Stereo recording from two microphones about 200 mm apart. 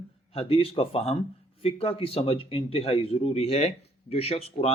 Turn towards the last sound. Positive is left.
turn(degrees=30)  # may be behind; listen again after turning